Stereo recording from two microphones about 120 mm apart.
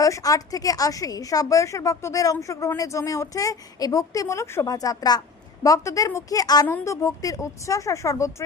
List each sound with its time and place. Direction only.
0.0 s a woman's voice: 30° left (ahead or behind)
6.7 s a woman's voice: 20° left (ahead or behind)